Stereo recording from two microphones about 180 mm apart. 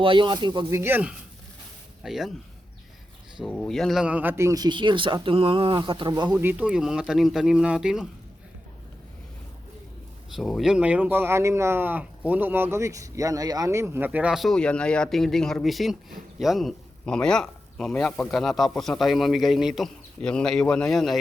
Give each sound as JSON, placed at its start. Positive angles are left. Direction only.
{"t": 0.0, "sound": "speech", "side_deg": -25}
{"t": 0.8, "sound": "speech", "side_deg": -10}
{"t": 3.4, "sound": "speech", "side_deg": 0}
{"t": 6.3, "sound": "speech", "side_deg": -10}
{"t": 10.3, "sound": "speech", "side_deg": 0}